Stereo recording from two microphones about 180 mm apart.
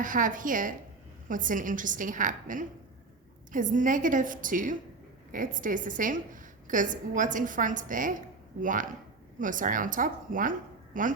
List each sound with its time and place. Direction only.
0.0 s a woman's voice: 45° right (ahead or behind)